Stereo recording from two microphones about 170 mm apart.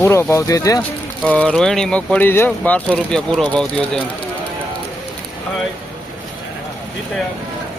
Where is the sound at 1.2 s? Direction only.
5° left (ahead or behind).